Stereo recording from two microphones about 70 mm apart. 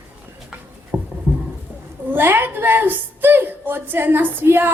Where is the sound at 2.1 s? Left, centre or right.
Right.